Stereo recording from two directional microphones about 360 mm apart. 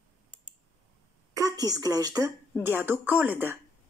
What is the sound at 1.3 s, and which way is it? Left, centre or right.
Speech, centre.